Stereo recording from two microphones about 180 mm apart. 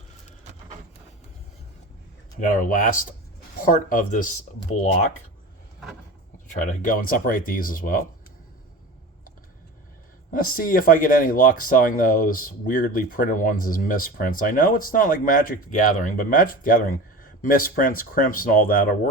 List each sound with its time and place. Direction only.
2.5 s speech: 50° left (ahead or behind)
6.5 s speech: 45° left (ahead or behind)
10.3 s speech: 50° left (ahead or behind)